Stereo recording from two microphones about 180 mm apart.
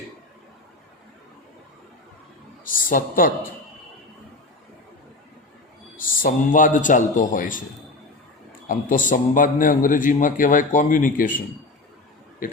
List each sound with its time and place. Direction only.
2.6 s a man's voice: 50° left (ahead or behind)
6.0 s a man's voice: 50° left (ahead or behind)
8.6 s a man's voice: 45° left (ahead or behind)
12.4 s a man's voice: 45° left (ahead or behind)